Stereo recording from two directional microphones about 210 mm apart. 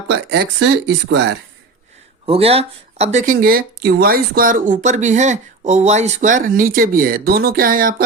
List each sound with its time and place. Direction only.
0.1 s speech: 50° right (ahead or behind)
2.2 s speech: 25° right (ahead or behind)